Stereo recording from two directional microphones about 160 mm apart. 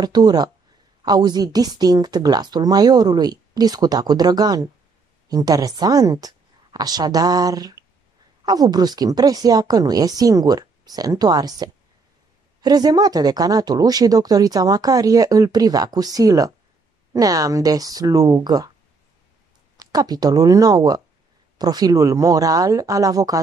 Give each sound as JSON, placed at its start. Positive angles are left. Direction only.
{"t": 0.0, "sound": "speech", "side_deg": -25}
{"t": 19.8, "sound": "speech", "side_deg": -25}